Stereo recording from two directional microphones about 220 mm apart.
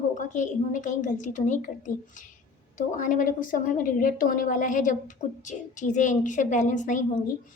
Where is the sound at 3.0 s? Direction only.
35° left (ahead or behind).